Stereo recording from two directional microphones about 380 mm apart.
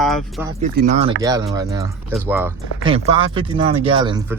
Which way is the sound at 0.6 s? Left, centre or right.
Centre.